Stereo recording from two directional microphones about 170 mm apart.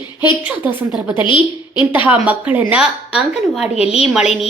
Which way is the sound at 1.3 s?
30° left (ahead or behind).